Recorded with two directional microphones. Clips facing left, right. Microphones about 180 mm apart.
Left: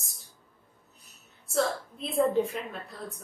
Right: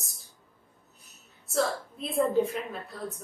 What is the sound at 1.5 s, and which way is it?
Speech, centre (ahead or behind).